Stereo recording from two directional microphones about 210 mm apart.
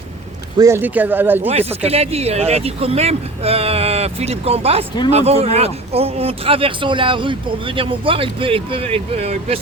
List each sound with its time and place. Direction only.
0.6 s speech: 10° right (ahead or behind)
1.8 s speech: 30° right (ahead or behind)